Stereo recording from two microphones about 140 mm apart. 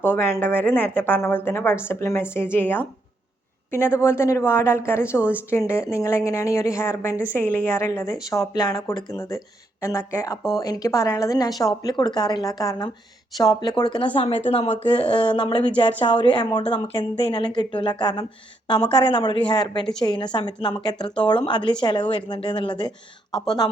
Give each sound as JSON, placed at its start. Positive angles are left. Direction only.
{"t": 0.0, "sound": "a woman's voice", "side_deg": 15}